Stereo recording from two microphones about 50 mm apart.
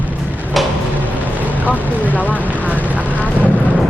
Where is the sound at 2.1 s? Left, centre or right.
Left.